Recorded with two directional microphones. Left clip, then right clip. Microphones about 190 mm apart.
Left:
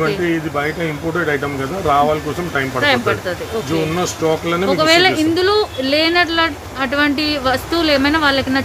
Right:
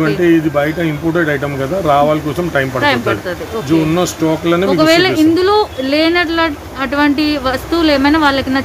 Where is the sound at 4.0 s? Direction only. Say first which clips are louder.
Right 2 dB; 40° right (ahead or behind).